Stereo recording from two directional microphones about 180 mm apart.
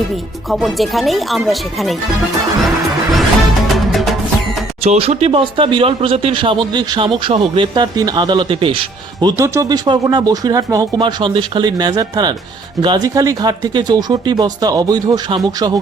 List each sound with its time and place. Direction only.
0.5 s speech: centre (ahead or behind)
4.8 s speech: 35° right (ahead or behind)